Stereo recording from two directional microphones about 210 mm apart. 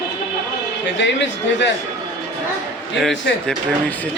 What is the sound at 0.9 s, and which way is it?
Speech, 55° left (ahead or behind).